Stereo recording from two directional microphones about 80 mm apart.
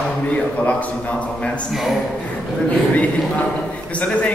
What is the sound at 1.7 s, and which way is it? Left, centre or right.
Speech, centre.